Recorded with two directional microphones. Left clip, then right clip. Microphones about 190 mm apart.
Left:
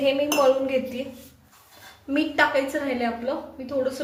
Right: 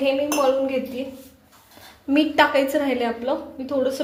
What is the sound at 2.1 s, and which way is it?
A woman's voice, 30° right (ahead or behind).